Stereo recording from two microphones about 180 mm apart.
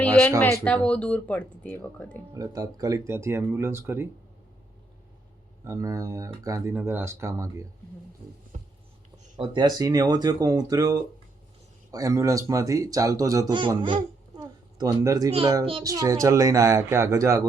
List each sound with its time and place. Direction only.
0.2 s speech: 5° left (ahead or behind)
2.3 s speech: 20° right (ahead or behind)
5.6 s speech: 15° right (ahead or behind)
8.5 s a sound: 40° right (ahead or behind)
9.4 s speech: 25° right (ahead or behind)
13.8 s babbling: 25° right (ahead or behind)
15.8 s speech: 20° right (ahead or behind)